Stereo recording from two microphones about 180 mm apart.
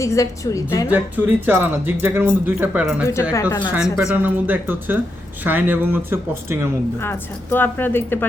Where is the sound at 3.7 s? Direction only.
5° right (ahead or behind).